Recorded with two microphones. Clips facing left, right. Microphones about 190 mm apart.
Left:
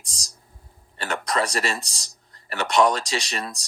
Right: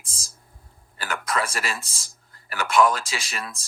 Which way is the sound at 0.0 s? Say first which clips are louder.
Left 1 dB; centre (ahead or behind).